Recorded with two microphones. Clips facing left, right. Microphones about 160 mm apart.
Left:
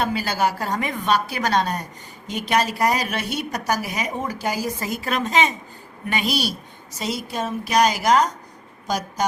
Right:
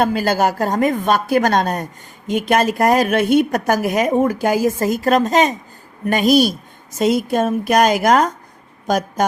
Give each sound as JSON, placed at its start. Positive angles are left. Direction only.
{"t": 0.0, "sound": "a woman's voice", "side_deg": -50}